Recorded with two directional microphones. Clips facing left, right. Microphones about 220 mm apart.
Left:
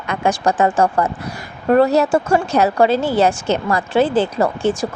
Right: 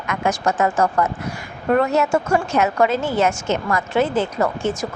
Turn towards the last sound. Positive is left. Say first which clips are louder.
# left 4 dB
turn(degrees=30)  # may be behind; listen again after turning